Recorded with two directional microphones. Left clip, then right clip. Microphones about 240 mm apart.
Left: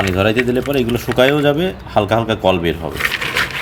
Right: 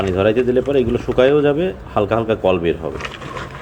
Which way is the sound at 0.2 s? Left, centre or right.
Left.